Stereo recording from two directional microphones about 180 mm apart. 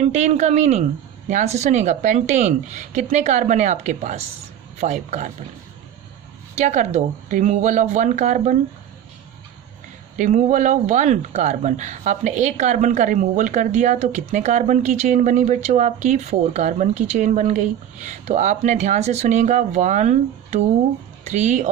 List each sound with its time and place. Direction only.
0.0 s speech: 40° right (ahead or behind)
6.7 s speech: 40° right (ahead or behind)
10.2 s speech: 45° right (ahead or behind)